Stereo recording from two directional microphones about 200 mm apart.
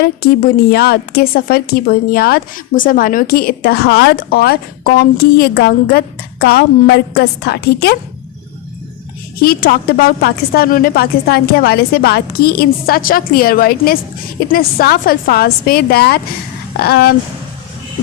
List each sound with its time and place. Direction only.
0.0 s a woman's voice: 50° left (ahead or behind)
9.4 s a woman's voice: 45° left (ahead or behind)